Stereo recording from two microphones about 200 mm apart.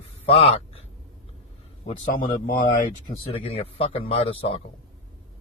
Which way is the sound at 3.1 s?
30° left (ahead or behind).